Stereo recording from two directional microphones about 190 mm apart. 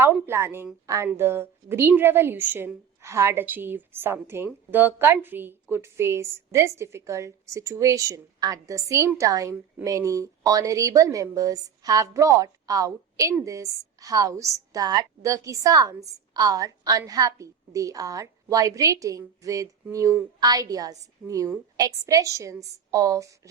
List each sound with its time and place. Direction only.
0.0 s a woman's voice: 15° right (ahead or behind)